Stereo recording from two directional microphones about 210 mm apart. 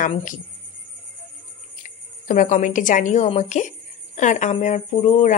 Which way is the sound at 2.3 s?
35° left (ahead or behind).